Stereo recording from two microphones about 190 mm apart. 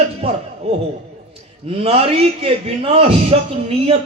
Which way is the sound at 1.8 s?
30° right (ahead or behind).